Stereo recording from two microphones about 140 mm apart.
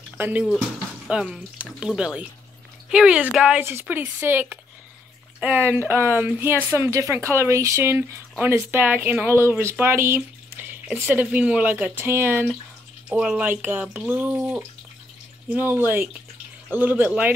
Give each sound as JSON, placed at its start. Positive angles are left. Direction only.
{"t": 0.2, "sound": "speech", "side_deg": -10}